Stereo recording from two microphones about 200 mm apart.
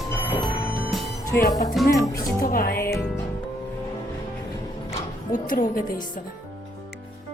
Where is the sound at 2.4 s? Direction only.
45° left (ahead or behind).